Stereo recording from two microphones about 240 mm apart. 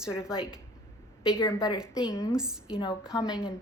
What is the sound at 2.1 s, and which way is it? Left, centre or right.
Speech, centre.